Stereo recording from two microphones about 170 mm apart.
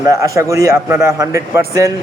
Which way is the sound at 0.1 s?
15° right (ahead or behind).